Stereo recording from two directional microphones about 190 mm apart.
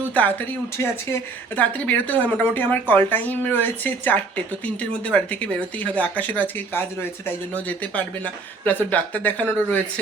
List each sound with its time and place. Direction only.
0.1 s speech: 10° left (ahead or behind)